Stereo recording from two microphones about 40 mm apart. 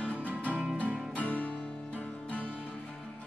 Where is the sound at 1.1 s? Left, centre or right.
Left.